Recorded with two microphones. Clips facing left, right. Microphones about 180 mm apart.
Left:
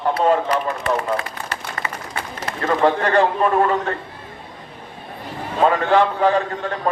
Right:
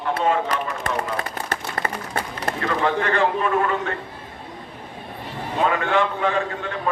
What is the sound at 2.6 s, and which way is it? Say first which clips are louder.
Speech: left 5 dB; 40° left (ahead or behind).